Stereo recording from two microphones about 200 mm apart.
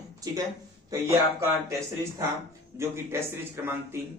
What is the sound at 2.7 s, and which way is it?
Speech, 15° right (ahead or behind).